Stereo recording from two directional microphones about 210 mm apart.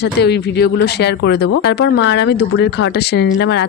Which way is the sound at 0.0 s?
50° left (ahead or behind).